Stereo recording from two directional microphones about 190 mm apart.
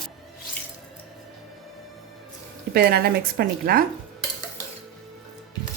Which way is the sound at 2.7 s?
55° right (ahead or behind).